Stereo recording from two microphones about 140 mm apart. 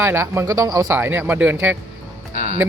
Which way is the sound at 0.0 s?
20° right (ahead or behind).